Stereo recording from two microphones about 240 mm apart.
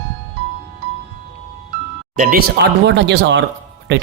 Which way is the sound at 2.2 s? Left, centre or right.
Right.